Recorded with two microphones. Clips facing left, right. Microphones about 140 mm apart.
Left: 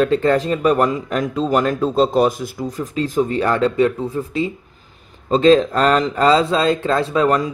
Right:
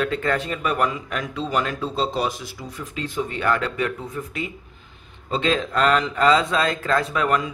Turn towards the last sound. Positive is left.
turn(degrees=35)  # may be behind; listen again after turning